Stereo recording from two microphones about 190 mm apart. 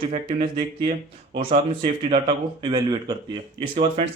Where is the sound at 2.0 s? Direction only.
25° right (ahead or behind).